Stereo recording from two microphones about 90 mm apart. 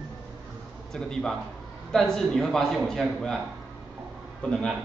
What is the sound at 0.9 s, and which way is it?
A man's voice, 5° left (ahead or behind).